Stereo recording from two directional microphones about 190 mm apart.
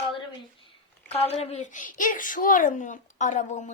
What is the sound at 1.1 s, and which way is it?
Speech, 35° left (ahead or behind).